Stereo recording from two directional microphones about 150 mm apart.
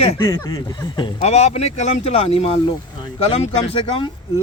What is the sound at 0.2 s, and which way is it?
Speech, 25° left (ahead or behind).